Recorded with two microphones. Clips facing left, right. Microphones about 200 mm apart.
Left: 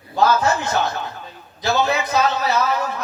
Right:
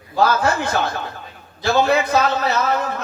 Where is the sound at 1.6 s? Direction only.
55° right (ahead or behind).